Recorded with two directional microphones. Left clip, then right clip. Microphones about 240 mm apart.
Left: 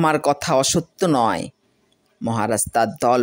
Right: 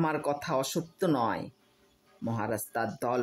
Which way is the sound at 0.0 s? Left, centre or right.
Left.